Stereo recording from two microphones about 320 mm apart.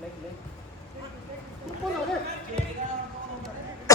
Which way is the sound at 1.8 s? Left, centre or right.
Centre.